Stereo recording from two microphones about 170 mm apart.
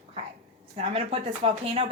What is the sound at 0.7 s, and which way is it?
Speech, 40° right (ahead or behind).